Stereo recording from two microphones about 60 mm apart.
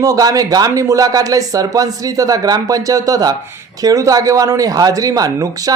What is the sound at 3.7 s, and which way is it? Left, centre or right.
Speech, right.